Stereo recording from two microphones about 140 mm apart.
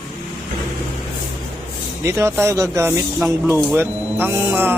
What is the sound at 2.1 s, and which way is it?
Speech, 20° right (ahead or behind).